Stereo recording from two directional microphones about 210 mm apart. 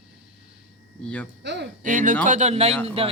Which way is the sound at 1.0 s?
5° left (ahead or behind).